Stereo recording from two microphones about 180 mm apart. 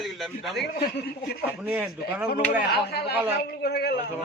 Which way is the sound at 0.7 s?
60° left (ahead or behind).